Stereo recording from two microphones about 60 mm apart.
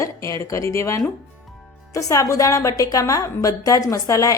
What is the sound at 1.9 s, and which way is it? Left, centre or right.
A woman's voice, left.